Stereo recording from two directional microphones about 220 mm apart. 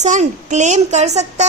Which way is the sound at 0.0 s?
35° right (ahead or behind).